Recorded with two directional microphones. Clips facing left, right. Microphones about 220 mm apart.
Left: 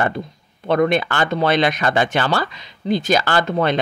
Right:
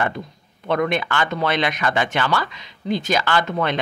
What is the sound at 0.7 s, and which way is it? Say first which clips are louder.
Speech: left 4 dB; 35° left (ahead or behind).